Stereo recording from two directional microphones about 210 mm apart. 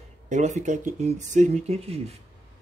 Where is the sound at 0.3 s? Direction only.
35° right (ahead or behind).